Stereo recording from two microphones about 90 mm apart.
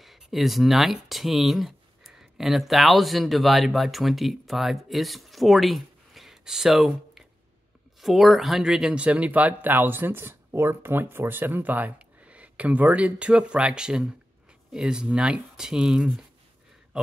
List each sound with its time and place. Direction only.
0.0 s speech: centre (ahead or behind)
8.0 s speech: centre (ahead or behind)